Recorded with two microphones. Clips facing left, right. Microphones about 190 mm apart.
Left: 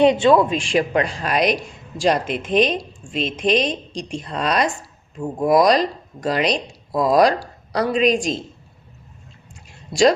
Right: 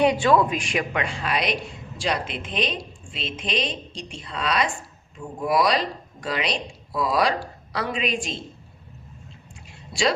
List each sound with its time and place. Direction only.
0.0 s a woman's voice: 25° left (ahead or behind); by 8.4 s 40° left (ahead or behind)